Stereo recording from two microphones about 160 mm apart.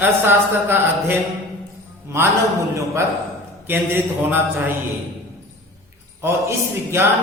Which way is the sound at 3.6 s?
10° right (ahead or behind).